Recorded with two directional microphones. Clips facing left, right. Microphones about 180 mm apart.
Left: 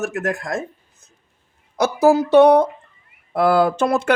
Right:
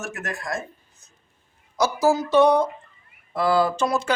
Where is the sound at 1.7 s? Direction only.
60° left (ahead or behind).